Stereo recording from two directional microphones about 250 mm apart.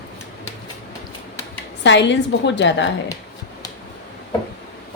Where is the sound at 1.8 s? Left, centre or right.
Left.